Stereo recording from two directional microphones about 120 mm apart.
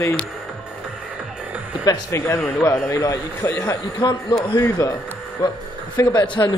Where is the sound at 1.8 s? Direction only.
25° left (ahead or behind).